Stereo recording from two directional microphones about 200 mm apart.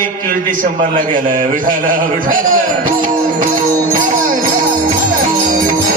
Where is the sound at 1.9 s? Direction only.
45° right (ahead or behind).